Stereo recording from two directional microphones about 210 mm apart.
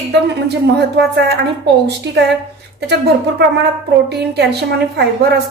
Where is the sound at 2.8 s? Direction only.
50° right (ahead or behind).